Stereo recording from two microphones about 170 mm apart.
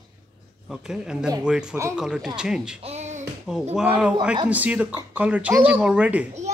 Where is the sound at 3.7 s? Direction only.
10° right (ahead or behind).